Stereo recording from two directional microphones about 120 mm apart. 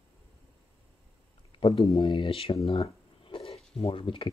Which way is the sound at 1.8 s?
55° left (ahead or behind).